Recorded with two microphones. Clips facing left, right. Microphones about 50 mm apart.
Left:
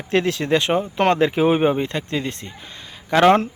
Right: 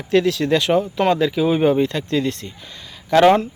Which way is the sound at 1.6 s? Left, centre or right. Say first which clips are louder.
Right 3 dB; left.